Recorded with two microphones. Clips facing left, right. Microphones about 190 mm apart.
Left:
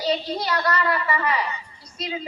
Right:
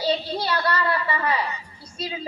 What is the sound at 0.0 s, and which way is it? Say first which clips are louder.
A child's voice: even; 30° right (ahead or behind).